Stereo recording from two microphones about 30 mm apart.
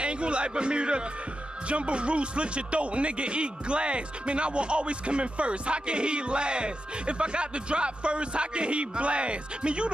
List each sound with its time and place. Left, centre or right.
0.0 s a man's voice: right